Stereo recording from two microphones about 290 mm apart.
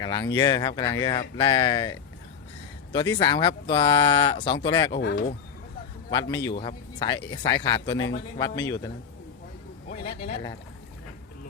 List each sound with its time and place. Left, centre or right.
0.0 s speech: centre
4.9 s speech: left
6.1 s speech: centre
9.9 s speech: left